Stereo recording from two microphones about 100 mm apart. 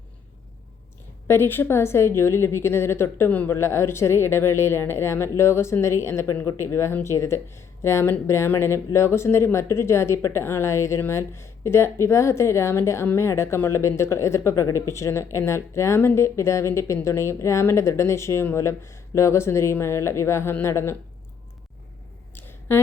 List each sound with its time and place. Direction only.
1.3 s speech: 20° left (ahead or behind)
22.7 s speech: 25° left (ahead or behind)